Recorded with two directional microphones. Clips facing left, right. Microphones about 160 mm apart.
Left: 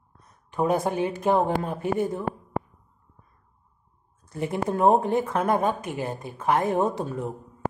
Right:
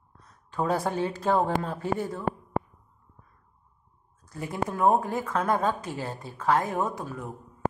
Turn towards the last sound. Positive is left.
turn(degrees=25)  # may be behind; listen again after turning